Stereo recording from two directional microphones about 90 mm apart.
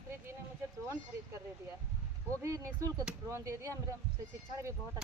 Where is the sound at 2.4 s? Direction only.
40° right (ahead or behind).